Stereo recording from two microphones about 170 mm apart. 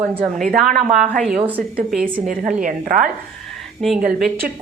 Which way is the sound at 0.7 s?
50° right (ahead or behind).